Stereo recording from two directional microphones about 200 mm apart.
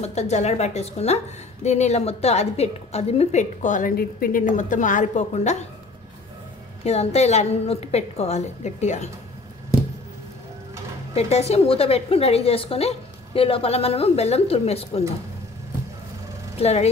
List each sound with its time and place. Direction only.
0.0 s a woman's voice: 35° left (ahead or behind)
6.8 s a woman's voice: 30° left (ahead or behind)
11.1 s a woman's voice: 30° left (ahead or behind)
16.5 s speech: 30° left (ahead or behind)